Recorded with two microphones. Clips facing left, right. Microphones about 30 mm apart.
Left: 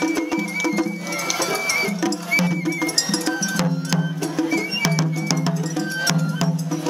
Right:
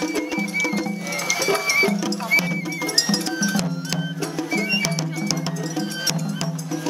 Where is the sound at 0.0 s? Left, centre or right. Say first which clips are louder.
Left 2 dB; centre.